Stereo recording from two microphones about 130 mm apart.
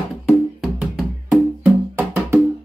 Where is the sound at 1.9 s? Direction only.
15° right (ahead or behind).